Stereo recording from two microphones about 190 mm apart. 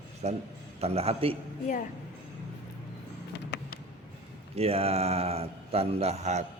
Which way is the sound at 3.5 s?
65° left (ahead or behind).